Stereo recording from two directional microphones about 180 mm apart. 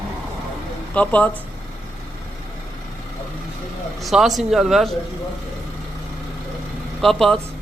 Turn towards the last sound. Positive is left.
turn(degrees=0)  # may be behind; listen again after turning